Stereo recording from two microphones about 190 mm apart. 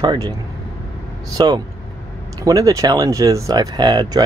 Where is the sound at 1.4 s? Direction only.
25° right (ahead or behind).